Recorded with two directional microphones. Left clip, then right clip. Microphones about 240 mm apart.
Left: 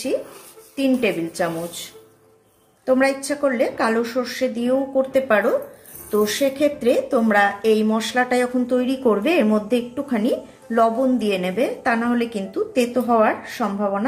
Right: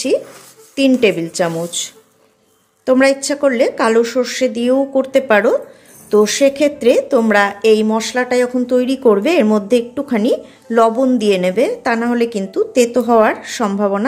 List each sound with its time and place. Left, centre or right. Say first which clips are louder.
0.7 s a woman's voice: right 7 dB; right